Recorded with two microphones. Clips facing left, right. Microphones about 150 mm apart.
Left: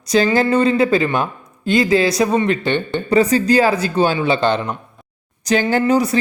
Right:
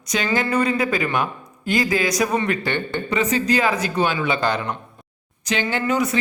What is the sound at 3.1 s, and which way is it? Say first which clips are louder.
Speech: left 7 dB; 35° left (ahead or behind).